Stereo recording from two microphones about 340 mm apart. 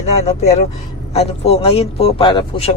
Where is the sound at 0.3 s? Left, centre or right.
Centre.